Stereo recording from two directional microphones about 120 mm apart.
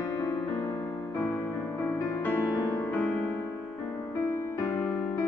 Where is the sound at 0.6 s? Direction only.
25° left (ahead or behind).